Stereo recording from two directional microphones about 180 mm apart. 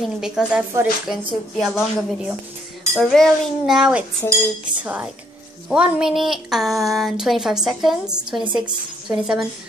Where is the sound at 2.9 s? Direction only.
Centre (ahead or behind).